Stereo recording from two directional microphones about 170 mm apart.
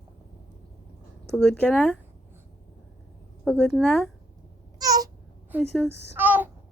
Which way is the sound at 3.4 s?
5° left (ahead or behind).